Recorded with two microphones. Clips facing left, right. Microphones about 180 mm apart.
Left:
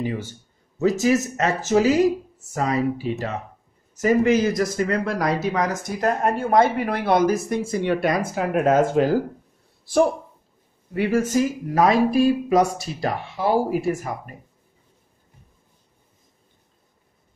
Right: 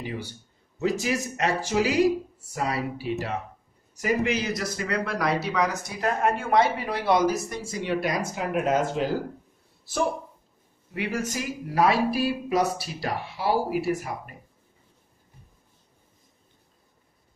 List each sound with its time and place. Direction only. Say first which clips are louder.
0.0 s speech: left 7 dB; 45° left (ahead or behind)
11.0 s speech: left 9 dB; 45° left (ahead or behind)